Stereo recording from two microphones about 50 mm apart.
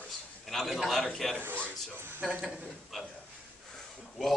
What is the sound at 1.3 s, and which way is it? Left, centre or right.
Speech, right.